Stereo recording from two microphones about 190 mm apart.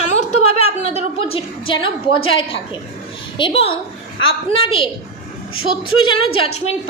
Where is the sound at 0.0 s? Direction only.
35° left (ahead or behind).